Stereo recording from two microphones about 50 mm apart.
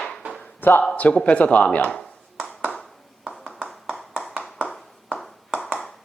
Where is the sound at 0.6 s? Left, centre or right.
Left.